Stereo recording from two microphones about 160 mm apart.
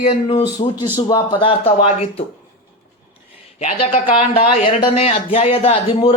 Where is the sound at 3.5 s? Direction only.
45° left (ahead or behind).